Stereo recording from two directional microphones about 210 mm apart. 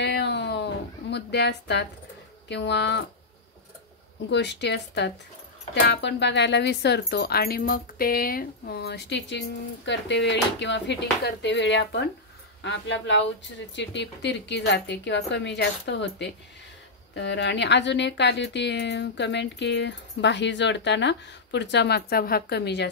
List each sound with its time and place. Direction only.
0.0 s a sound: 55° left (ahead or behind)
1.1 s a woman's voice: 55° left (ahead or behind)
4.3 s speech: 55° left (ahead or behind)